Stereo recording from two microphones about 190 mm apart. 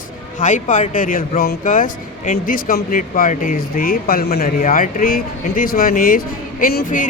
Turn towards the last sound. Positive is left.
turn(degrees=45)  # may be behind; listen again after turning